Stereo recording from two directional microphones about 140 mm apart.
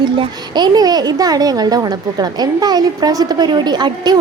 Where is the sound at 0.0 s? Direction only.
30° right (ahead or behind).